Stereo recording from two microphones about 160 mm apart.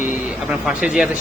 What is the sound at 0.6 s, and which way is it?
Speech, 5° right (ahead or behind).